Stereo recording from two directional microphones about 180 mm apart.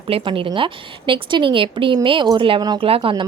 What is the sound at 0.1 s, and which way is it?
A woman's voice, 30° right (ahead or behind).